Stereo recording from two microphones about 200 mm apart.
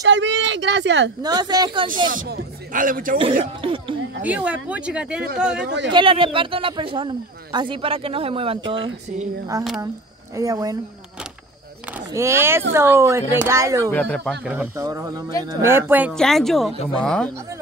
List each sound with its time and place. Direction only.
0.0 s speech: 65° right (ahead or behind)
1.2 s speech: 20° right (ahead or behind)
2.1 s speech: 50° right (ahead or behind)
3.6 s speech: 25° right (ahead or behind)
4.2 s speech: 5° right (ahead or behind)
5.9 s speech: 25° right (ahead or behind)
9.5 s speech: 15° right (ahead or behind)
12.1 s speech: 15° right (ahead or behind)
13.8 s speech: 5° left (ahead or behind)
14.4 s speech: 10° right (ahead or behind)
16.2 s speech: centre (ahead or behind)